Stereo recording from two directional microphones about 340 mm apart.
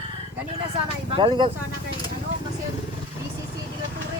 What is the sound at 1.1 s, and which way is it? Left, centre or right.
Speech, centre.